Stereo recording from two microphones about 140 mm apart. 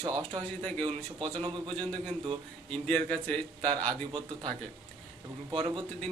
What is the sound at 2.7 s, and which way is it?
Speech, 10° left (ahead or behind).